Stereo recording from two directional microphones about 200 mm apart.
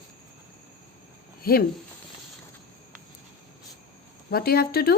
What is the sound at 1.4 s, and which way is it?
Speech, 50° left (ahead or behind).